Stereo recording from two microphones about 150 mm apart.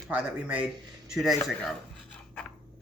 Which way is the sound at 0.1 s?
10° right (ahead or behind).